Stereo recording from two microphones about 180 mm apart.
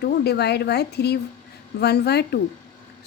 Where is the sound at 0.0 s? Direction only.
65° left (ahead or behind).